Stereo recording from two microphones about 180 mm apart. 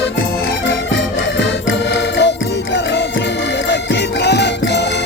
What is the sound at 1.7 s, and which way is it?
Music, 80° left.